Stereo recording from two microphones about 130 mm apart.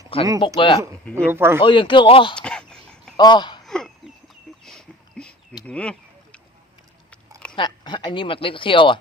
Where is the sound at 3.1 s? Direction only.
35° left (ahead or behind).